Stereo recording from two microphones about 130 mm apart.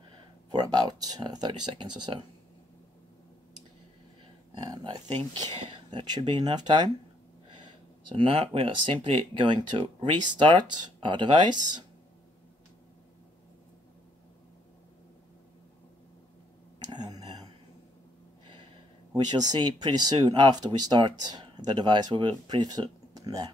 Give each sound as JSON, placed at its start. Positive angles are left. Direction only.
{"t": 0.5, "sound": "speech", "side_deg": -30}
{"t": 4.6, "sound": "speech", "side_deg": -30}
{"t": 8.1, "sound": "speech", "side_deg": -40}
{"t": 16.9, "sound": "a sound", "side_deg": -30}
{"t": 19.1, "sound": "speech", "side_deg": -35}